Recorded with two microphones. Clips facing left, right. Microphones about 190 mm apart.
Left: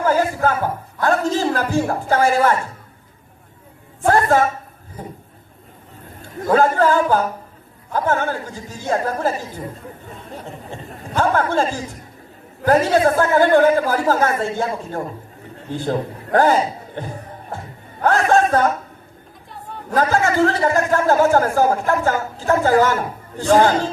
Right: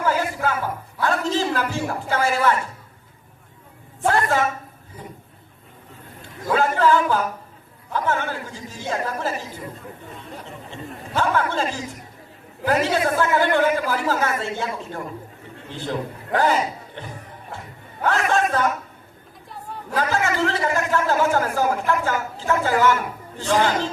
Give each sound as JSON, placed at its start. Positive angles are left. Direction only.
{"t": 0.0, "sound": "a sound", "side_deg": 45}
{"t": 4.0, "sound": "a man's voice", "side_deg": 45}
{"t": 6.5, "sound": "a sound", "side_deg": 45}
{"t": 7.9, "sound": "a man's voice", "side_deg": 45}
{"t": 11.2, "sound": "a man's voice", "side_deg": 45}
{"t": 19.9, "sound": "a man's voice", "side_deg": 45}